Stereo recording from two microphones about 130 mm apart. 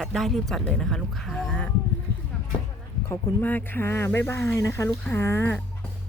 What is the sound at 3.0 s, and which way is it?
Speech, 20° left (ahead or behind).